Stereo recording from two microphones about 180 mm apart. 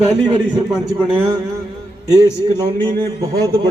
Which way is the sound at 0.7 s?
5° right (ahead or behind).